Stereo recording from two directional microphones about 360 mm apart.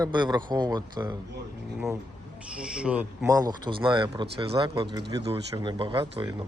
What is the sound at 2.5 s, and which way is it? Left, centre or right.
Speech, centre.